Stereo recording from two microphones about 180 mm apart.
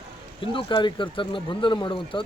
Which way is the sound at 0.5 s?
25° left (ahead or behind).